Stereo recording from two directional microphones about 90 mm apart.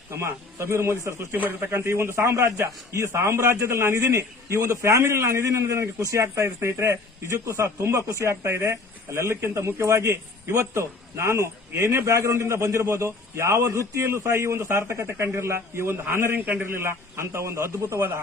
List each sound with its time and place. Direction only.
0.1 s speech: 30° right (ahead or behind)